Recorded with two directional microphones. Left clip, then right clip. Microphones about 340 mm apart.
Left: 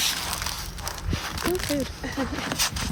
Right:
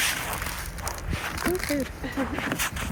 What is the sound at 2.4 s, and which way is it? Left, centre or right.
Speech, left.